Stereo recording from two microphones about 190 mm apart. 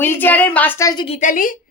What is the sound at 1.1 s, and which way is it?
Speech, 45° left (ahead or behind).